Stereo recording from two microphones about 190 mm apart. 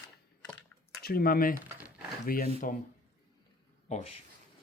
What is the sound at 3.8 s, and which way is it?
Speech, 35° left (ahead or behind).